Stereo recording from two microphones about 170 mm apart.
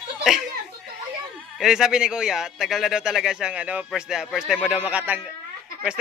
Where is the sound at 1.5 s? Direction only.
Centre (ahead or behind).